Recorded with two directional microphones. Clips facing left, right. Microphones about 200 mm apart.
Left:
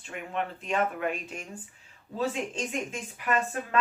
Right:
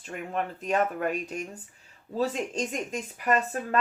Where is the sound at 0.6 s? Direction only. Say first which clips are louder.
Right 3 dB; 40° right (ahead or behind).